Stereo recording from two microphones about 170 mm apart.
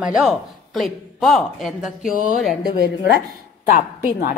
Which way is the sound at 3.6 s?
55° left (ahead or behind).